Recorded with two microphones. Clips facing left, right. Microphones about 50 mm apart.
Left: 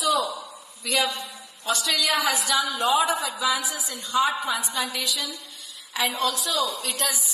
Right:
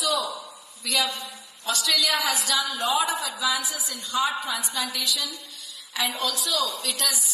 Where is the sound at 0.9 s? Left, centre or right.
Left.